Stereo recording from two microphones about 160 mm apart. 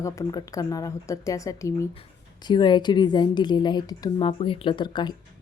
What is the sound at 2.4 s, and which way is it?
Speech, 30° left (ahead or behind).